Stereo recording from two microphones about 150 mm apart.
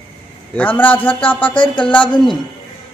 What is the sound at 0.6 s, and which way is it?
Speech, 10° left (ahead or behind).